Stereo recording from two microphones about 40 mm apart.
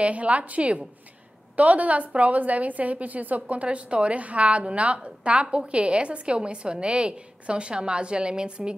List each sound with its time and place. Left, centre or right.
0.0 s a woman's voice: right
3.6 s a woman's voice: right